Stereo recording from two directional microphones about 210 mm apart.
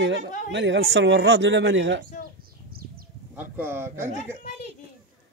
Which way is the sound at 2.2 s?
45° right (ahead or behind).